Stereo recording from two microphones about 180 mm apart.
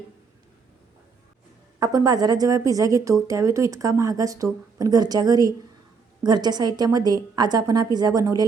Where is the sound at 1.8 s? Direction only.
20° right (ahead or behind).